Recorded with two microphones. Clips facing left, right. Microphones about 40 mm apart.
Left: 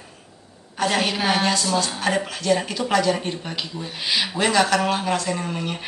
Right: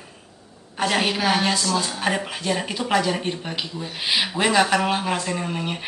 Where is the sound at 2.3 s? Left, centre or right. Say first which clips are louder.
Left 3 dB; centre.